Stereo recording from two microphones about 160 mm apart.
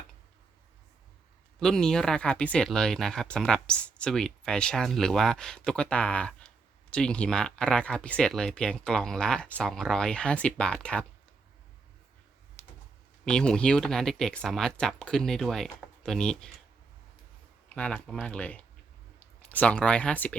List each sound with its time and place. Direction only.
1.5 s speech: 5° left (ahead or behind)
12.6 s a sound: 15° left (ahead or behind)
13.2 s speech: 5° left (ahead or behind)
17.7 s speech: 10° left (ahead or behind)